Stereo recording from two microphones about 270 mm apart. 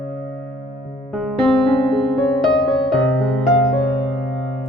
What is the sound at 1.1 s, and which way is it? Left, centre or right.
Music, centre.